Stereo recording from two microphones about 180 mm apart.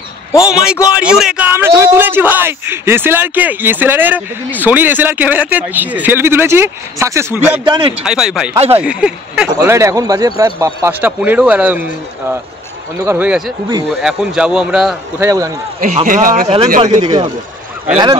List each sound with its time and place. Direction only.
0.5 s a man's voice: 5° right (ahead or behind)
7.6 s a man's voice: 25° right (ahead or behind)
8.0 s speech: 5° right (ahead or behind)
8.5 s speech: 35° right (ahead or behind)
8.8 s speech: 5° right (ahead or behind)
9.6 s a man's voice: 15° right (ahead or behind)
13.0 s a man's voice: 10° right (ahead or behind)
15.2 s a man's voice: 20° right (ahead or behind)
16.1 s speech: 50° right (ahead or behind)
17.0 s a man's voice: 25° right (ahead or behind)